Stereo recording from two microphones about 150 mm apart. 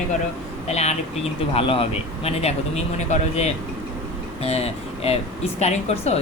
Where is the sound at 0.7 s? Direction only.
45° left (ahead or behind).